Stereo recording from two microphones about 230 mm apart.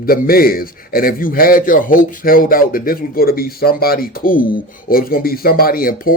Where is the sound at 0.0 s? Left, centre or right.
Left.